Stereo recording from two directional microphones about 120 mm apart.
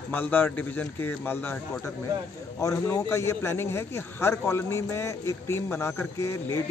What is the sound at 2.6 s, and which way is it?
A man's voice, 25° left (ahead or behind).